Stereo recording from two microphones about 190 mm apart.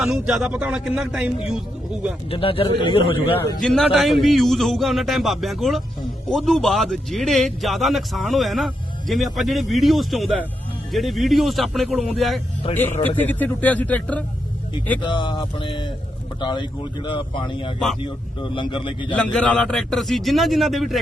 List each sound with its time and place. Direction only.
0.0 s a man's voice: 5° right (ahead or behind)
2.3 s speech: 30° left (ahead or behind)
3.3 s a man's voice: 5° left (ahead or behind)
15.0 s speech: 25° left (ahead or behind)
19.1 s a man's voice: 5° left (ahead or behind)